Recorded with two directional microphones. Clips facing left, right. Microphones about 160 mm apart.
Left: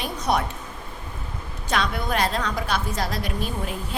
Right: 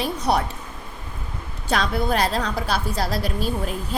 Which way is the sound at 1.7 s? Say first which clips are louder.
Right 3 dB; 35° right (ahead or behind).